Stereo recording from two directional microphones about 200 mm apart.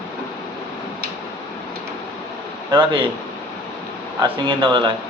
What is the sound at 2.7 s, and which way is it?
Speech, 25° right (ahead or behind).